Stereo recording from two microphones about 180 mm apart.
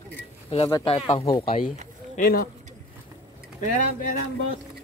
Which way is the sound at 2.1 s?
55° left (ahead or behind).